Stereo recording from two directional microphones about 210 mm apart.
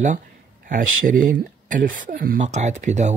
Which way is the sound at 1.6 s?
40° right (ahead or behind).